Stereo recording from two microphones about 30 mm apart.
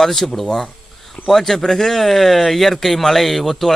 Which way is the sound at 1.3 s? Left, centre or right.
Centre.